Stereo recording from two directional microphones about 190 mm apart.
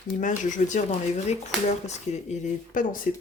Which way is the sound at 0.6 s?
40° left (ahead or behind).